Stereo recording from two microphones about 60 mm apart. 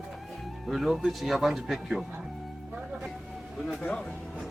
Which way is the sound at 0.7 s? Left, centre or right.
Centre.